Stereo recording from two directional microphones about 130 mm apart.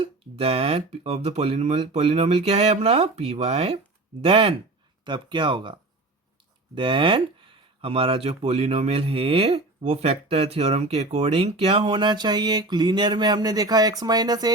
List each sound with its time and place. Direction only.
0.0 s speech: 50° right (ahead or behind)
6.7 s speech: 40° right (ahead or behind)